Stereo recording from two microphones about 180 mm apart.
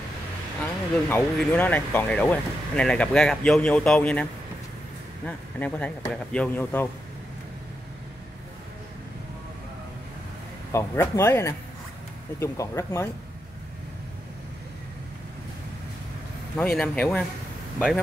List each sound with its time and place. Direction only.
0.6 s speech: 10° left (ahead or behind)
10.7 s speech: 15° left (ahead or behind)
16.5 s speech: 5° left (ahead or behind)